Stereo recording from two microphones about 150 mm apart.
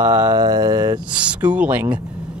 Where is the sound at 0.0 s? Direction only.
25° right (ahead or behind).